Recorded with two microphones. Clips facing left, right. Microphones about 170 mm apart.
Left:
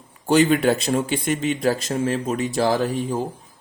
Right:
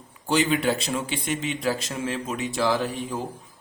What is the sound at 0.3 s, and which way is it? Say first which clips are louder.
A man's voice: left 6 dB; 45° left (ahead or behind).